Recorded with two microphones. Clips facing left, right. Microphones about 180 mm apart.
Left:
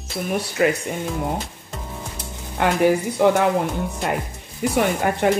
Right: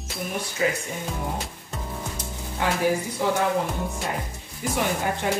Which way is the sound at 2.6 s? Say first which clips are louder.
Left 6 dB; 65° left (ahead or behind).